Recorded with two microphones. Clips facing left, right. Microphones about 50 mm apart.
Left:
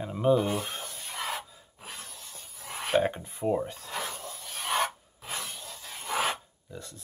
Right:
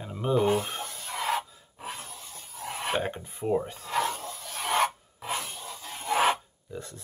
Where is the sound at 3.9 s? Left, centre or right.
Right.